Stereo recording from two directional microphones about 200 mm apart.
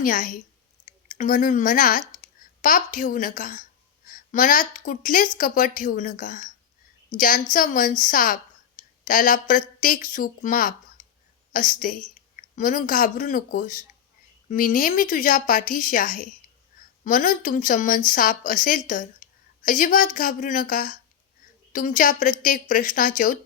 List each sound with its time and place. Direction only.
0.0 s a woman's voice: 40° left (ahead or behind)